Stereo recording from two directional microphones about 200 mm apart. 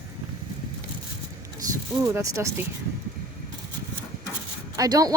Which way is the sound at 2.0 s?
15° right (ahead or behind).